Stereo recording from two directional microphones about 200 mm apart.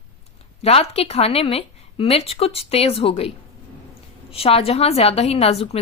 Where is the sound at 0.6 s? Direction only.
30° left (ahead or behind).